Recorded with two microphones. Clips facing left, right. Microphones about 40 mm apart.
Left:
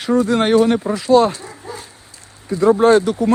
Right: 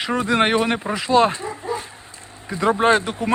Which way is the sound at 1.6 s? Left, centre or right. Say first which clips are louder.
Right 6 dB; right.